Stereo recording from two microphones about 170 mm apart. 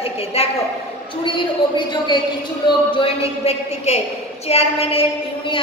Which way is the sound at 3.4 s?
40° left (ahead or behind).